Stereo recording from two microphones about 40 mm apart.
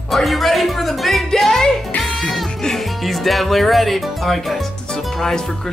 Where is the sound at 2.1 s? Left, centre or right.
Left.